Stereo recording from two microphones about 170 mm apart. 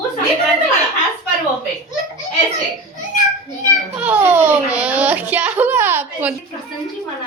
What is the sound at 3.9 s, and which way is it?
A child's voice, 10° right (ahead or behind).